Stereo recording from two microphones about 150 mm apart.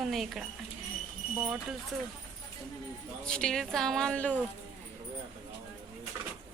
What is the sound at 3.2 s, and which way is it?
Speech, 5° left (ahead or behind).